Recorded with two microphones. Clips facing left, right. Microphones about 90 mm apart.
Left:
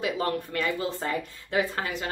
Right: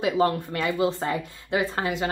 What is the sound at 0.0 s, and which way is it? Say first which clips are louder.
Speech: right 5 dB; 25° right (ahead or behind).